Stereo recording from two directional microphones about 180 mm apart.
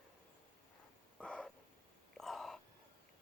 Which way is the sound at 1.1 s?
5° left (ahead or behind).